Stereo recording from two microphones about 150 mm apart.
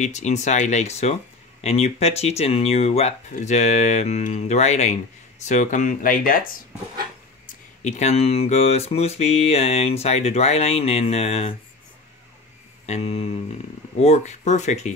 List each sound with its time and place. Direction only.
0.0 s speech: 50° left (ahead or behind); by 6.5 s 70° left (ahead or behind)
7.8 s speech: 50° left (ahead or behind)
12.8 s a sound: 45° left (ahead or behind)
13.9 s speech: 45° left (ahead or behind)